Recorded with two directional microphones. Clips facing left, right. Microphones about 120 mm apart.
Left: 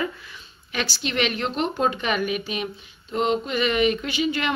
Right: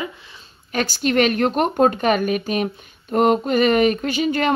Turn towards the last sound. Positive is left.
turn(degrees=-45)  # may be behind; listen again after turning